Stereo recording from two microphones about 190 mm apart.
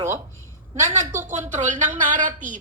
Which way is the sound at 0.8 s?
40° right (ahead or behind).